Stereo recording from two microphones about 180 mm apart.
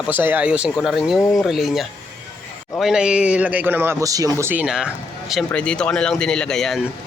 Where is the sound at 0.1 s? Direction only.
10° right (ahead or behind).